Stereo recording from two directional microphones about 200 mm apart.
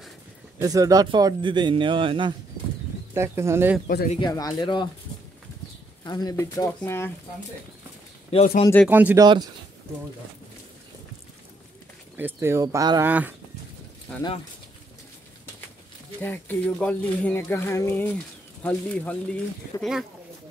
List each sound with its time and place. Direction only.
0.6 s a man's voice: 15° right (ahead or behind)
3.2 s speech: 15° right (ahead or behind)
3.8 s speech: 50° left (ahead or behind)
4.2 s speech: 20° left (ahead or behind)
6.0 s speech: 20° left (ahead or behind)
8.3 s speech: 30° left (ahead or behind)
8.8 s speech: 10° right (ahead or behind)
12.2 s speech: 10° right (ahead or behind)
16.2 s speech: 10° left (ahead or behind)